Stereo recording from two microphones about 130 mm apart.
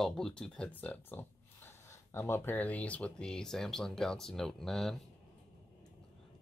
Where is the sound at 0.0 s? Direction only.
5° left (ahead or behind).